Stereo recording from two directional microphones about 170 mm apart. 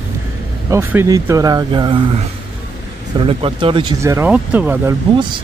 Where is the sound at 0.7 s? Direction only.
15° right (ahead or behind); by 2.1 s 30° right (ahead or behind).